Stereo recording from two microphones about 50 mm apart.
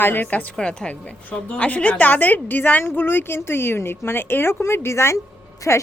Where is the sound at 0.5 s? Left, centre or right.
Centre; by 5.8 s left.